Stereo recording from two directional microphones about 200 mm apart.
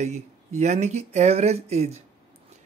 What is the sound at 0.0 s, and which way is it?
Speech, 35° right (ahead or behind).